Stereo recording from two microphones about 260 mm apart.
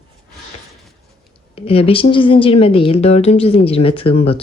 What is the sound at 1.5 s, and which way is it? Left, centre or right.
Speech, left.